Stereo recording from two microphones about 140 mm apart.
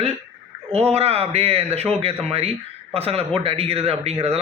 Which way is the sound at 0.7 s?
45° right (ahead or behind).